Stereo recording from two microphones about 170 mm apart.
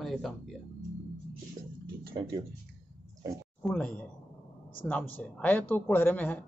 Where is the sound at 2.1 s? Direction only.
30° right (ahead or behind).